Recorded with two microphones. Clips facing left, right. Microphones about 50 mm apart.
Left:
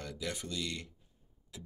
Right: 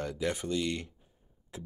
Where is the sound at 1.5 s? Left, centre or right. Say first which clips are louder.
Right 6 dB; right.